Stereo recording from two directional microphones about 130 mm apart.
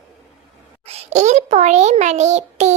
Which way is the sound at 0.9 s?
60° right (ahead or behind).